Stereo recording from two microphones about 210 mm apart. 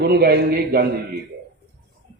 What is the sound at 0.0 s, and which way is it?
Speech, 50° right (ahead or behind).